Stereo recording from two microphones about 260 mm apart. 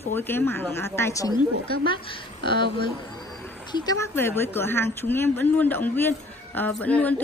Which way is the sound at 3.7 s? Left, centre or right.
Centre.